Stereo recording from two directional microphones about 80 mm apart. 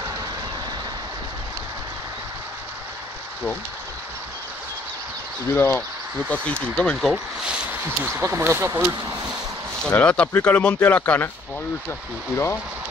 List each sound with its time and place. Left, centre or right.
5.5 s speech: left
6.3 s speech: centre
7.0 s speech: centre
8.1 s speech: right
9.9 s speech: centre